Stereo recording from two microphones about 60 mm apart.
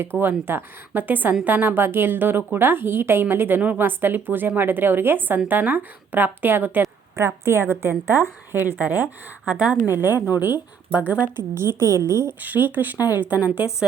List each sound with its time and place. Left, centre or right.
0.2 s a woman's voice: right
7.2 s a woman's voice: right
9.8 s a woman's voice: right
11.3 s a woman's voice: right
12.4 s speech: right